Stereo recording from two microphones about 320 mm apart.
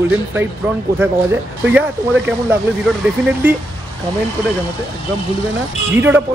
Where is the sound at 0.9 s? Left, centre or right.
Centre.